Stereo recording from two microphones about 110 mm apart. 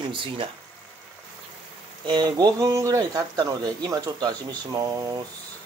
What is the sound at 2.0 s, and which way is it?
Speech, 45° right (ahead or behind).